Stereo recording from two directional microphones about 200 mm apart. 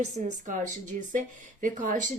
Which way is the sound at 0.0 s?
40° right (ahead or behind).